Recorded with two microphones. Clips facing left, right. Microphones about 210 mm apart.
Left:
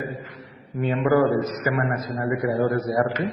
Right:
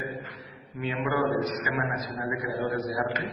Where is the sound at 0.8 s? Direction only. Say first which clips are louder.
Left 8 dB; 50° left (ahead or behind).